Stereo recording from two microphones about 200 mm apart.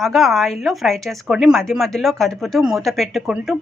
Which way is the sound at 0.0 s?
Centre (ahead or behind).